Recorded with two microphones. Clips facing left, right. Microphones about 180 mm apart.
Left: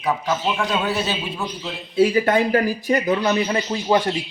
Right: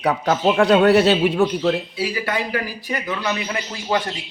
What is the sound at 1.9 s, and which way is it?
Speech, 50° left (ahead or behind).